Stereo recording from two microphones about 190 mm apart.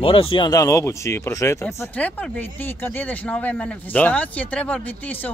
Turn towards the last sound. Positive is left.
turn(degrees=5)  # may be behind; listen again after turning